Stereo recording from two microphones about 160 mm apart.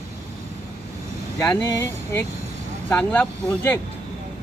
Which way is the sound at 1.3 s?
15° left (ahead or behind).